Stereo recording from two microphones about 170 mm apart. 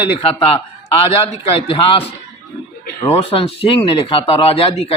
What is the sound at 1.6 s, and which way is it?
Speech, 30° left (ahead or behind).